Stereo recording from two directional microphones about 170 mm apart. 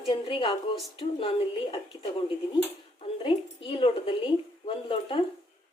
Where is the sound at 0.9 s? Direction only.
30° left (ahead or behind).